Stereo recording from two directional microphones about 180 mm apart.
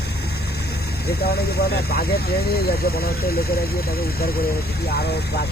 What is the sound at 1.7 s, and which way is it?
Speech, 60° left (ahead or behind).